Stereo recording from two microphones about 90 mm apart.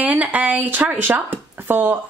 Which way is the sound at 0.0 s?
15° right (ahead or behind).